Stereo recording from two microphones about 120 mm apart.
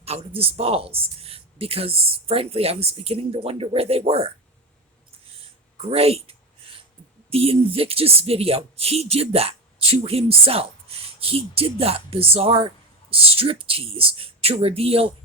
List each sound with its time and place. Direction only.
0.0 s speech: 55° right (ahead or behind)
5.9 s speech: 55° right (ahead or behind)